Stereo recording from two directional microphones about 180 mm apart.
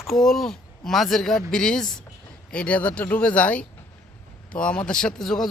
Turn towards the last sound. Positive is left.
turn(degrees=0)  # may be behind; listen again after turning